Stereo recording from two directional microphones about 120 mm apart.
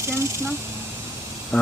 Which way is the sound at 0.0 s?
25° right (ahead or behind).